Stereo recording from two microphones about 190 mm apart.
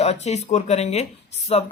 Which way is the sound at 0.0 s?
35° left (ahead or behind).